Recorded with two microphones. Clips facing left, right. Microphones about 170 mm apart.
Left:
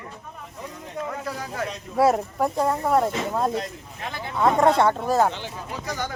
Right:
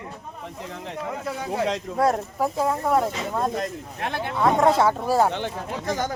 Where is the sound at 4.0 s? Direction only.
70° right (ahead or behind).